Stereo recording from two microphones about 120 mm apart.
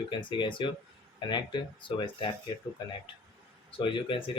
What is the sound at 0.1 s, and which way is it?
Speech, 40° left (ahead or behind).